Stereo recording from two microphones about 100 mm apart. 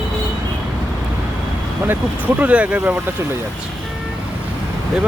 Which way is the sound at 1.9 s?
15° right (ahead or behind).